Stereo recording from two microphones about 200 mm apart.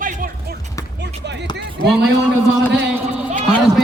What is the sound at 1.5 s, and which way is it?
Speech, 55° right (ahead or behind).